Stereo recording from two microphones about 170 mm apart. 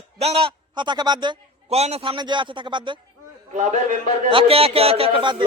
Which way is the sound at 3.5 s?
45° right (ahead or behind).